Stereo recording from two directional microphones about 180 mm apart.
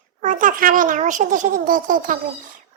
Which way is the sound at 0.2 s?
45° right (ahead or behind).